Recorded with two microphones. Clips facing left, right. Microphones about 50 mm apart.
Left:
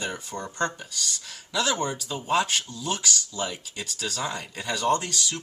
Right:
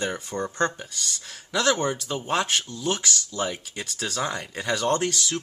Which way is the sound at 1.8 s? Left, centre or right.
Right.